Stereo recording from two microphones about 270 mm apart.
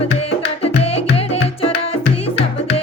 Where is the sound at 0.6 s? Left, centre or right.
Left.